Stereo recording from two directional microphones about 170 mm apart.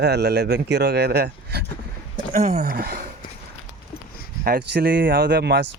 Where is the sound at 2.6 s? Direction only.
60° right (ahead or behind).